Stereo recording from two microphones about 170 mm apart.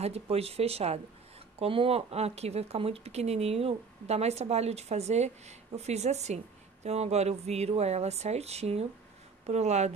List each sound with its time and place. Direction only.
0.0 s speech: 35° right (ahead or behind)